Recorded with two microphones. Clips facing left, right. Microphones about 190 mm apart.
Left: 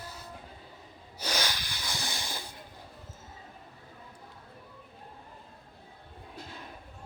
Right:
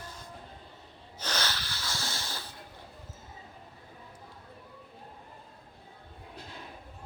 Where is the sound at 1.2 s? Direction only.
10° left (ahead or behind).